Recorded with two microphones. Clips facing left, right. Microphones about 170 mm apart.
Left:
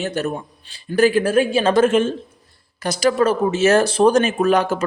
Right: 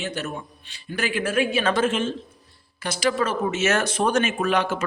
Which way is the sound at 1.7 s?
45° left (ahead or behind).